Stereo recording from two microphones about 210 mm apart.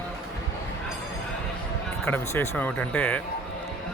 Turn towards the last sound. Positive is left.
turn(degrees=5)  # may be behind; listen again after turning